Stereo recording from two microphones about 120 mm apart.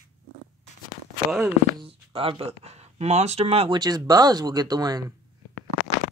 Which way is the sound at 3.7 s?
35° right (ahead or behind).